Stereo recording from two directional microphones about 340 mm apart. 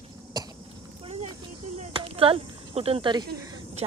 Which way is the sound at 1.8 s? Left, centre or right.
Centre.